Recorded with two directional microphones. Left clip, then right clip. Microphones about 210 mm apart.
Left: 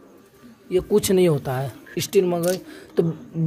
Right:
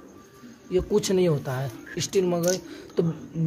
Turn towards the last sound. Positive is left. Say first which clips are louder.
# left 4 dB
turn(degrees=25)  # may be behind; listen again after turning